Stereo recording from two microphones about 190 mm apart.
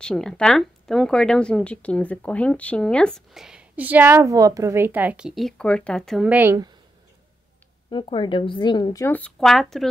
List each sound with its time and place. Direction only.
0.0 s speech: 5° left (ahead or behind)
7.9 s a woman's voice: 25° left (ahead or behind); by 9.8 s centre (ahead or behind)